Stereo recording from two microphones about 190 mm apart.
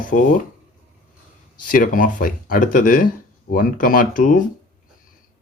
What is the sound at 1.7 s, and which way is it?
Speech, 45° left (ahead or behind).